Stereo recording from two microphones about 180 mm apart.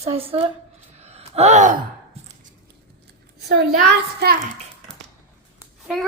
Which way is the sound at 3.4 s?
65° right (ahead or behind).